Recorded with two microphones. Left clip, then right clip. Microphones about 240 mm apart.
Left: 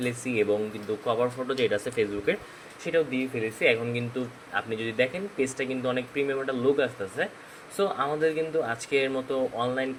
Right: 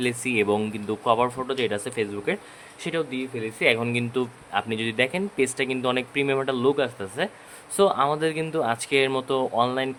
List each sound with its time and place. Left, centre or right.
0.0 s speech: right